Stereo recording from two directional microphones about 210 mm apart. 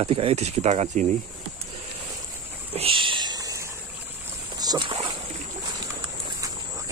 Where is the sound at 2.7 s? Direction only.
25° right (ahead or behind).